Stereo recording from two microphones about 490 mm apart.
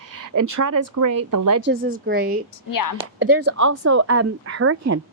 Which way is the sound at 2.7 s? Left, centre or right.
Left.